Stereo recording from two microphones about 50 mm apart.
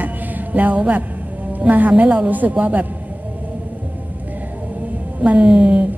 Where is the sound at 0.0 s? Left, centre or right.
Right.